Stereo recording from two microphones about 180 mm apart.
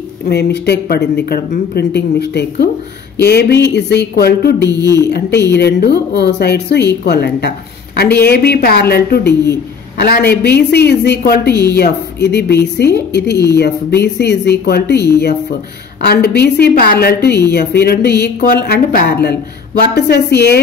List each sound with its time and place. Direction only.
0.3 s a woman's voice: 65° left (ahead or behind)
4.6 s speech: 20° right (ahead or behind)
5.1 s a woman's voice: 70° left (ahead or behind)